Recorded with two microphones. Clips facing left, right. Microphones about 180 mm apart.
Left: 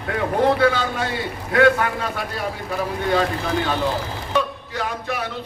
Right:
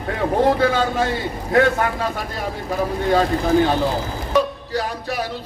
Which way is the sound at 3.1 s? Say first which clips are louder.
Right 5 dB; 40° right (ahead or behind).